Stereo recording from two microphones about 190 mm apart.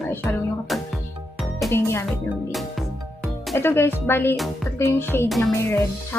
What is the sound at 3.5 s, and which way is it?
Speech, 10° left (ahead or behind).